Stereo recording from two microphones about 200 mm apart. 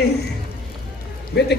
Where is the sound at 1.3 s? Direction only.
55° left (ahead or behind).